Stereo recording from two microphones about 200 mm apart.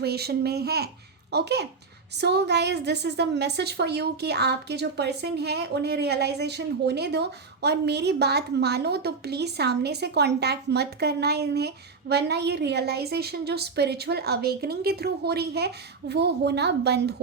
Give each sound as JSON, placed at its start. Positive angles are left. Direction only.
{"t": 0.0, "sound": "a child's voice", "side_deg": -50}